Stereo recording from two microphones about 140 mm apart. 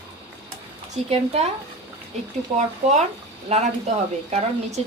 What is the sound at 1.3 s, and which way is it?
Speech, 50° right (ahead or behind).